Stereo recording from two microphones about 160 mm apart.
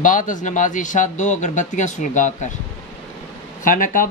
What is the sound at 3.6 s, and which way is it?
Speech, 55° left (ahead or behind).